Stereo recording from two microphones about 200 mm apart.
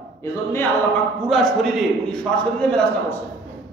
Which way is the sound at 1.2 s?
Centre (ahead or behind).